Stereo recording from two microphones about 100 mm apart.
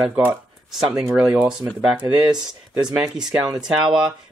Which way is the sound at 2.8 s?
40° right (ahead or behind).